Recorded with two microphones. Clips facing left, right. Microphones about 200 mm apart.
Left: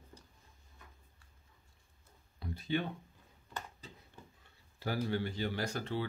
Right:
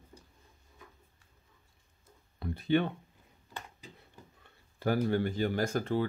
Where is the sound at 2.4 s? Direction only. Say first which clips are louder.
Right 7 dB; 60° right (ahead or behind).